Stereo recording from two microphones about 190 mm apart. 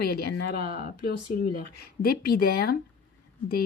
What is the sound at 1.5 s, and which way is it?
A woman's voice, 55° left (ahead or behind).